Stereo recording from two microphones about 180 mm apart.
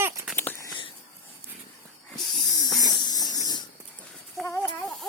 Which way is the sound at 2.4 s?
20° left (ahead or behind).